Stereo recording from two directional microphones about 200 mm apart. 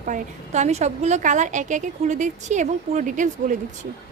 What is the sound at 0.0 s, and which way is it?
A woman's voice, 40° right (ahead or behind).